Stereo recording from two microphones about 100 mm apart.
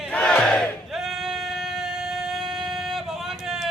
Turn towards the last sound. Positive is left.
turn(degrees=-5)  # may be behind; listen again after turning